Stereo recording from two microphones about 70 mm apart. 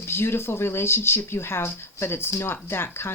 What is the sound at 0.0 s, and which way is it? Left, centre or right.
Speech, left.